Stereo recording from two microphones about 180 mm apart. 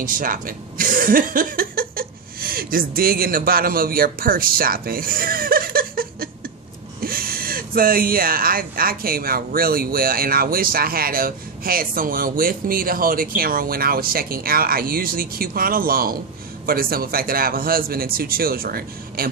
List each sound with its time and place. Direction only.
0.0 s speech: 50° right (ahead or behind)